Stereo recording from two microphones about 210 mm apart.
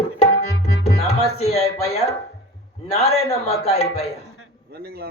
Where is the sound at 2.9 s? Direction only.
30° left (ahead or behind).